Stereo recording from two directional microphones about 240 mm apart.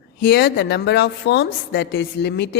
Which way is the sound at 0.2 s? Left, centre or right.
Left.